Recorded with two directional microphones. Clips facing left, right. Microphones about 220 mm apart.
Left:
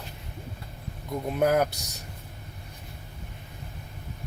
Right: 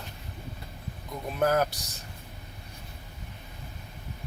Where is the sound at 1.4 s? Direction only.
15° left (ahead or behind).